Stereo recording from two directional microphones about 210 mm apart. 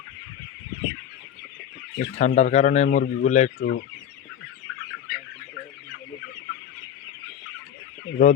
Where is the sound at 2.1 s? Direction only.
35° left (ahead or behind).